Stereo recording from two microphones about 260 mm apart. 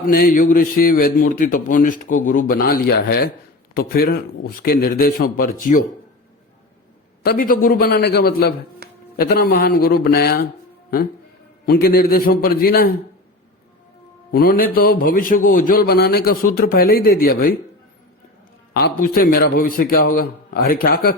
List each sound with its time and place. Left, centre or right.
0.1 s a man's voice: left
7.2 s a man's voice: left
11.6 s a man's voice: left
14.3 s a man's voice: left
18.7 s a man's voice: left